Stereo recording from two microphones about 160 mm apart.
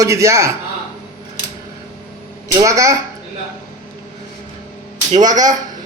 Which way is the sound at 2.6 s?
20° right (ahead or behind).